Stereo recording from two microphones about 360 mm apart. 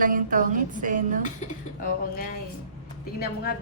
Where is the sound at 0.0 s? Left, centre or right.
Right.